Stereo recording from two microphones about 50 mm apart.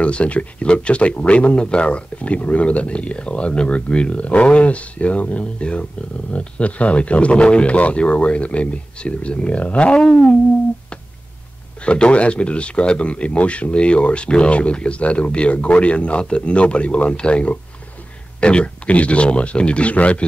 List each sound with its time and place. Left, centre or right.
0.0 s speech: left
11.8 s speech: left